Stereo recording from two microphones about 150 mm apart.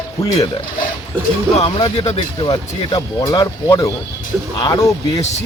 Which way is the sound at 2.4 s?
25° left (ahead or behind).